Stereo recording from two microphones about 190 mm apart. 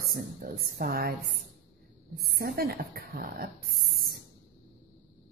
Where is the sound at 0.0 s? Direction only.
50° right (ahead or behind).